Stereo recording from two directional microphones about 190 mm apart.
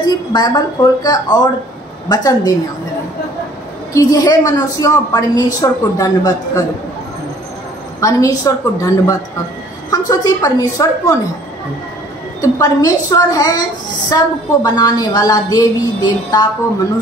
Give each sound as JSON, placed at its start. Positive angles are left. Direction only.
{"t": 0.0, "sound": "a woman's voice", "side_deg": 20}
{"t": 3.9, "sound": "a woman's voice", "side_deg": 20}
{"t": 8.0, "sound": "a woman's voice", "side_deg": 15}
{"t": 9.8, "sound": "a woman's voice", "side_deg": 20}
{"t": 12.4, "sound": "a woman's voice", "side_deg": 20}